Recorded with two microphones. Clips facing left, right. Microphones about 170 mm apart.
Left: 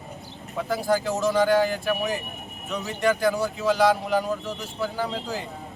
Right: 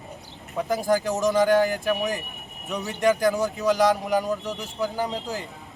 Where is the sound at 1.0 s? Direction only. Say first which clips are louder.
Right 1 dB; 15° right (ahead or behind).